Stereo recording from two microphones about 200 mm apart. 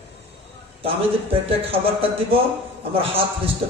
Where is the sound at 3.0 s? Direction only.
30° right (ahead or behind).